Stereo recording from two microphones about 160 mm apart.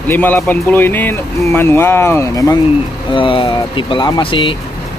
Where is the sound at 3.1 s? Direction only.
30° left (ahead or behind).